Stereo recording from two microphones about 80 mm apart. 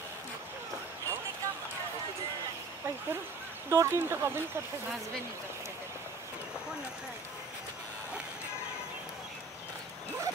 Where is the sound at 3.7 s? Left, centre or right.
Right.